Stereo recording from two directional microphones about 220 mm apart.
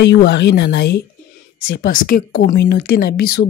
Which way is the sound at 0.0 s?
50° left (ahead or behind).